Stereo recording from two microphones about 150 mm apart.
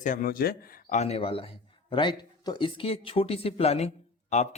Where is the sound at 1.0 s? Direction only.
40° left (ahead or behind).